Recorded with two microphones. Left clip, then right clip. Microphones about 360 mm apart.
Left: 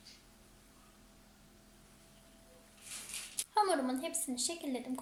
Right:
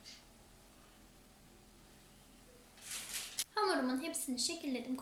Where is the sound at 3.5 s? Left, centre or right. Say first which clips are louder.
Left 3 dB; centre.